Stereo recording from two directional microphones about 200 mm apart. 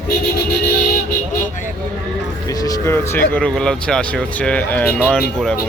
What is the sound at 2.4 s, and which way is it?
Speech, 20° left (ahead or behind).